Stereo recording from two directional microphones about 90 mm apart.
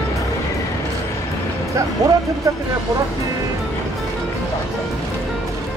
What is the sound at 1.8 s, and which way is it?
Speech, 40° right (ahead or behind).